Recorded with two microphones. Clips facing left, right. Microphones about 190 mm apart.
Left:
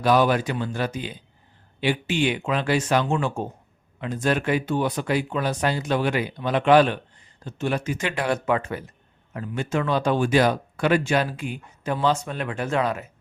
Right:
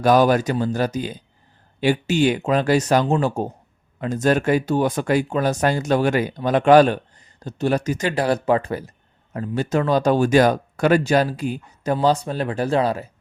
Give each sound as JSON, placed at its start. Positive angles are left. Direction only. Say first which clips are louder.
{"t": 0.0, "sound": "speech", "louder": "right 4 dB", "side_deg": -45}